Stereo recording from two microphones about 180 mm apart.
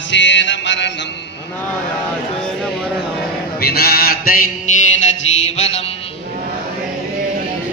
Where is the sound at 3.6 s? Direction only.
60° left (ahead or behind).